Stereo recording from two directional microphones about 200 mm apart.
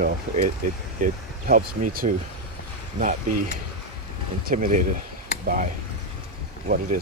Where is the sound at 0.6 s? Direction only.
40° right (ahead or behind).